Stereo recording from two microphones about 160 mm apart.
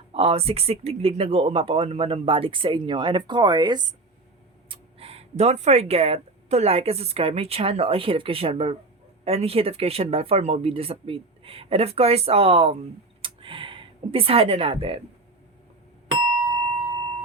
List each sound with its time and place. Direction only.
0.1 s speech: 35° right (ahead or behind)
4.7 s speech: 35° right (ahead or behind)
13.2 s a sound: 35° right (ahead or behind)
16.5 s music: 30° right (ahead or behind)